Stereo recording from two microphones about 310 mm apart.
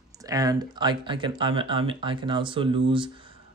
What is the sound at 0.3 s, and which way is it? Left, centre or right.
Speech, centre.